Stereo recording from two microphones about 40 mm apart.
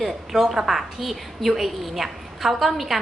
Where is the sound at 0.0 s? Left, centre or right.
Centre.